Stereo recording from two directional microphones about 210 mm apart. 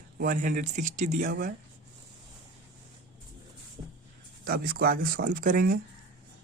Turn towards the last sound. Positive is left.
turn(degrees=-40)  # may be behind; listen again after turning